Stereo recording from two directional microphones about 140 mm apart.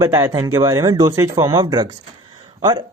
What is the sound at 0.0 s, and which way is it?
Speech, 25° right (ahead or behind).